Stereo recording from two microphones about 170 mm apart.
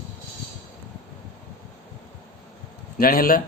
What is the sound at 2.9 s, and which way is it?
Speech, 60° left (ahead or behind).